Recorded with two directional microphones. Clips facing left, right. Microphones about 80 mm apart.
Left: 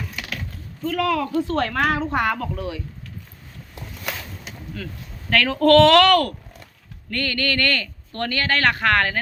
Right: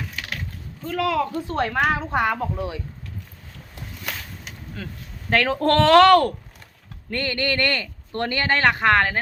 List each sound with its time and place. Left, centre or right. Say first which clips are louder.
0.9 s speech: left 1 dB; right
4.8 s speech: even; right